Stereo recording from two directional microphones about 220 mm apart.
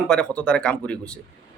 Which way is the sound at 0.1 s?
5° left (ahead or behind).